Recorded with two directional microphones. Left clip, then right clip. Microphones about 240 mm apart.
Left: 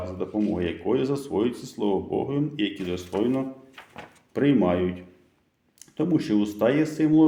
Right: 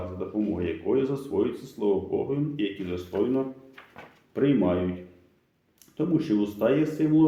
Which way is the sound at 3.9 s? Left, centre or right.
Left.